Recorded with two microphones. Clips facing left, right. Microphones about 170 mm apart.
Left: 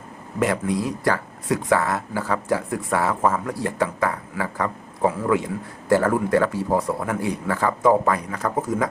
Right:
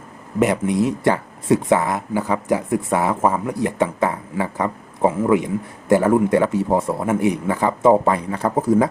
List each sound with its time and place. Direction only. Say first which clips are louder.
0.3 s speech: right 4 dB; 20° right (ahead or behind)